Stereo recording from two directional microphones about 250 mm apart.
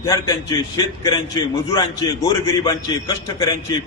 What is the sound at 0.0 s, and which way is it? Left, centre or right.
Speech, centre.